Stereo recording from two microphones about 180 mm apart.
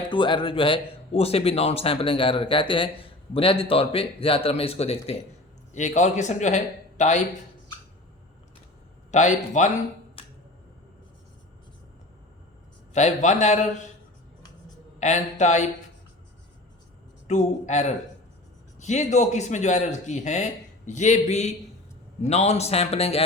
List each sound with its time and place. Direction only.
0.1 s speech: 25° left (ahead or behind)
9.1 s speech: 40° left (ahead or behind)
10.2 s a sound: 30° left (ahead or behind)
12.9 s speech: 40° left (ahead or behind)
14.9 s speech: 40° left (ahead or behind)
17.2 s speech: 40° left (ahead or behind)